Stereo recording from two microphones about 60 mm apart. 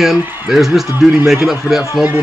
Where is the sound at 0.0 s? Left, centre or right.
Centre.